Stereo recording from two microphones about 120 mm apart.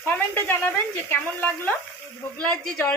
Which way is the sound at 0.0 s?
15° left (ahead or behind).